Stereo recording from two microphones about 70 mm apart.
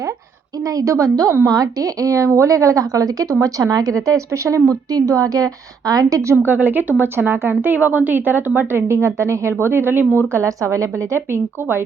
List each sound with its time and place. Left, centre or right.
0.7 s a woman's voice: right
6.2 s a woman's voice: right
10.3 s a woman's voice: right